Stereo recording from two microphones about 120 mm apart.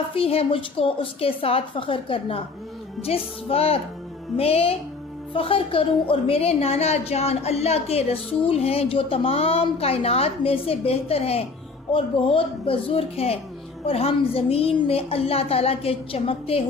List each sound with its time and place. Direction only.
0.1 s a woman's voice: 50° left (ahead or behind)